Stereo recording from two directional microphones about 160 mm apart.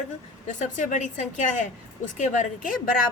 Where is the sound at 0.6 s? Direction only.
50° left (ahead or behind).